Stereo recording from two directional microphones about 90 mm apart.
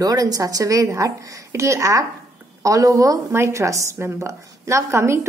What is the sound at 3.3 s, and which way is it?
A woman's voice, 30° right (ahead or behind).